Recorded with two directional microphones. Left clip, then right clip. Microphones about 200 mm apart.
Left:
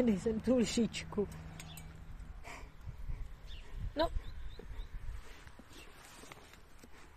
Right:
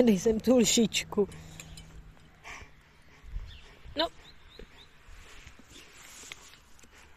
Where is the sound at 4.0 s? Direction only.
5° right (ahead or behind).